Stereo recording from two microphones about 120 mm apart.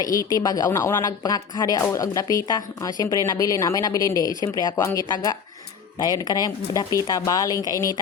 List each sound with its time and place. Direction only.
0.0 s speech: 30° left (ahead or behind)